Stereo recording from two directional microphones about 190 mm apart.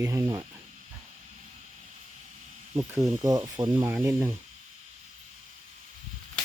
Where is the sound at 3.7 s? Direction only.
15° right (ahead or behind).